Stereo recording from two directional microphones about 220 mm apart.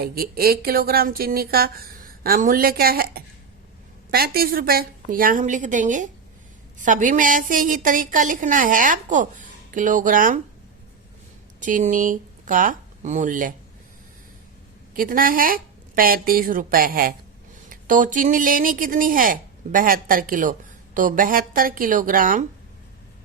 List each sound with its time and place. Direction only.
0.0 s speech: 40° right (ahead or behind)
11.6 s speech: 35° right (ahead or behind)
14.9 s speech: 40° right (ahead or behind)